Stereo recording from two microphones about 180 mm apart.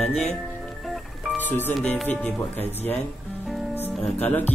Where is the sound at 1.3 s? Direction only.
10° left (ahead or behind).